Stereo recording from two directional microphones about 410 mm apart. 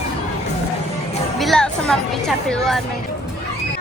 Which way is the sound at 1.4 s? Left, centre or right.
Centre.